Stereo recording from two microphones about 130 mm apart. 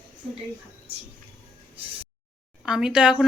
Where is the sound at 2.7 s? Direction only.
5° right (ahead or behind).